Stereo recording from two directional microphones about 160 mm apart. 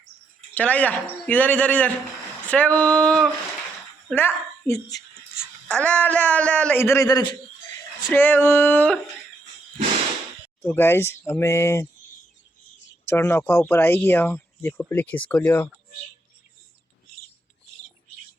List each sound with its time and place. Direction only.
0.5 s speech: 10° left (ahead or behind); by 7.3 s 25° left (ahead or behind)
8.0 s speech: 10° left (ahead or behind)
10.6 s speech: 15° left (ahead or behind)
13.1 s speech: 15° left (ahead or behind)